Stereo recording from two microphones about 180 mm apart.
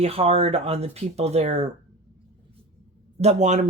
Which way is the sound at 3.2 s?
40° right (ahead or behind).